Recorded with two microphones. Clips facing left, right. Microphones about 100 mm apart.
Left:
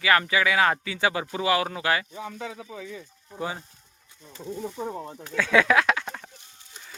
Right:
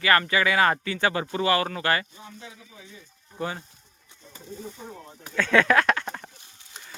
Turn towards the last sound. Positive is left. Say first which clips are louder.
# right 1 dB
turn(degrees=0)  # may be behind; listen again after turning